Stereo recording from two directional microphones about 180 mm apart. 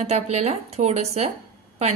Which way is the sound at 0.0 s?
35° right (ahead or behind).